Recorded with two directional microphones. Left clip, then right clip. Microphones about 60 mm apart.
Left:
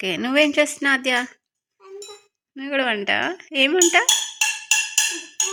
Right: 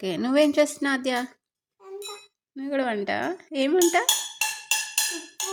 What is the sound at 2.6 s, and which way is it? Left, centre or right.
A woman's voice, right.